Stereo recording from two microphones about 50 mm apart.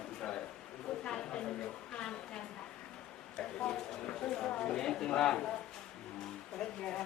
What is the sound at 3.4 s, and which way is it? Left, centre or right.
Speech, centre.